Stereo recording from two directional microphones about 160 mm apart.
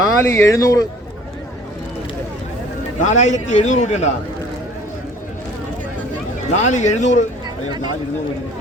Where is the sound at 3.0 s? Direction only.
50° left (ahead or behind).